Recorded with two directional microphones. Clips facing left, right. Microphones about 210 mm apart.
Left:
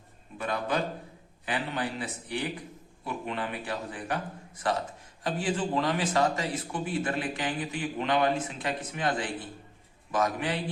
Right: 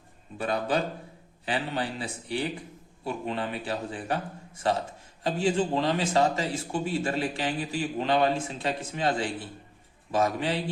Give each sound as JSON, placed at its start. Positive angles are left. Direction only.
{"t": 0.3, "sound": "a man's voice", "side_deg": -30}